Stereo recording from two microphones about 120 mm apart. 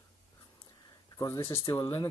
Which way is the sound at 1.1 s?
30° left (ahead or behind).